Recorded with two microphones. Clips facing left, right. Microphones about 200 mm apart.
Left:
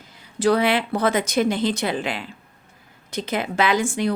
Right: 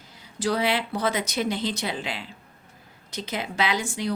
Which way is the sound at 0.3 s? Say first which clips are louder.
Left 6 dB; 55° left (ahead or behind).